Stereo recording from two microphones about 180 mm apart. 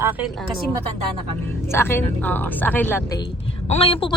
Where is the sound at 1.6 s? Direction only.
15° left (ahead or behind).